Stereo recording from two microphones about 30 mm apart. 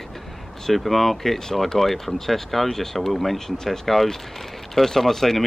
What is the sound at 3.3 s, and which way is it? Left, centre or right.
Speech, centre.